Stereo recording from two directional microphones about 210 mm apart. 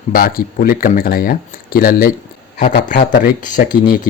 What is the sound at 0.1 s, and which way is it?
Speech, 45° left (ahead or behind).